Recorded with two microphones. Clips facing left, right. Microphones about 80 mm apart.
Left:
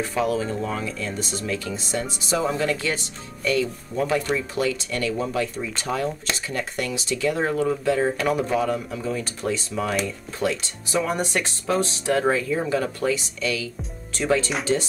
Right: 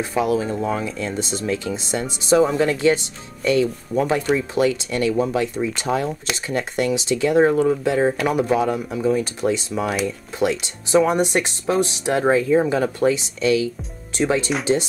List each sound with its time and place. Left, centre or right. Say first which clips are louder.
0.0 s speech: right 3 dB; centre